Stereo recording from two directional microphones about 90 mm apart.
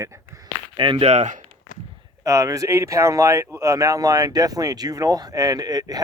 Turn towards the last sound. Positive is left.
turn(degrees=-45)  # may be behind; listen again after turning